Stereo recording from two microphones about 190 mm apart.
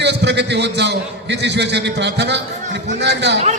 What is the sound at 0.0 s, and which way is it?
A man's voice, 65° right (ahead or behind).